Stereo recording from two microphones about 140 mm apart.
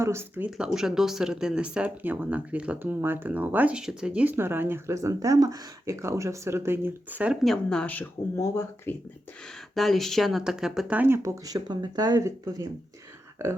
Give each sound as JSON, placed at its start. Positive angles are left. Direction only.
{"t": 0.0, "sound": "speech", "side_deg": -20}
{"t": 0.5, "sound": "speech", "side_deg": -5}
{"t": 7.4, "sound": "speech", "side_deg": 5}
{"t": 9.7, "sound": "speech", "side_deg": 0}